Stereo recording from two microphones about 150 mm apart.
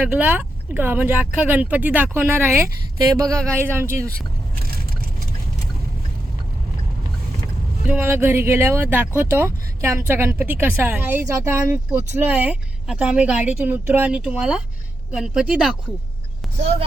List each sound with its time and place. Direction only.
0.0 s speech: 10° right (ahead or behind)
7.9 s speech: 15° right (ahead or behind)